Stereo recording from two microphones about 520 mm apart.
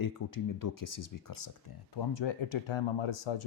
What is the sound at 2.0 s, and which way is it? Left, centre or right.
Speech, left.